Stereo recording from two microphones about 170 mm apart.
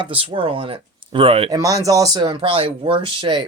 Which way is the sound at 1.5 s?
20° right (ahead or behind).